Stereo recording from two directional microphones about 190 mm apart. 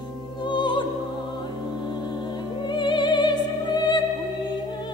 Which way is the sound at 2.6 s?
25° left (ahead or behind).